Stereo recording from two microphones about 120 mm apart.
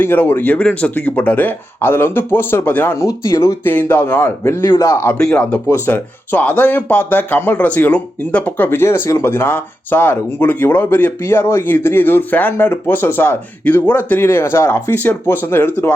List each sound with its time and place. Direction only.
0.0 s speech: 15° left (ahead or behind)
3.6 s speech: 15° left (ahead or behind)
5.1 s speech: 5° left (ahead or behind)
5.6 s speech: 20° left (ahead or behind)